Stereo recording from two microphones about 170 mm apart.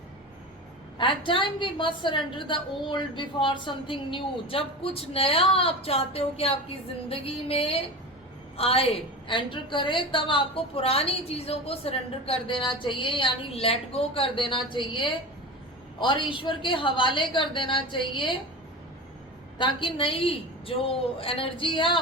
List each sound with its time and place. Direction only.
0.9 s a woman's voice: 30° left (ahead or behind)
19.5 s a woman's voice: 30° left (ahead or behind)